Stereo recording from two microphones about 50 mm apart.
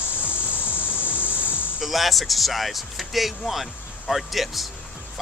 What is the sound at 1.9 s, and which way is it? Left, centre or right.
Speech, centre.